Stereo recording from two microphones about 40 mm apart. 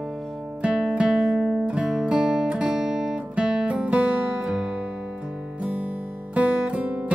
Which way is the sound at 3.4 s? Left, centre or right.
Right.